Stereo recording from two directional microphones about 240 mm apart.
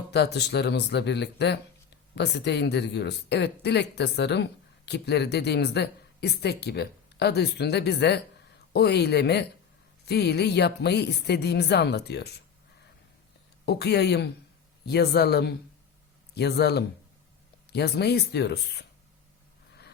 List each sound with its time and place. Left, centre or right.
0.1 s speech: left
13.7 s speech: left